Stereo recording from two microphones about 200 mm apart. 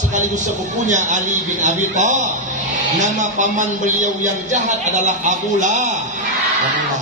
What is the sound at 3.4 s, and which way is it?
A man's voice, 40° right (ahead or behind).